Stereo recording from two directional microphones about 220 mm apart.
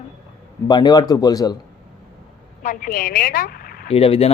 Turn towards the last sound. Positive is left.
turn(degrees=25)  # may be behind; listen again after turning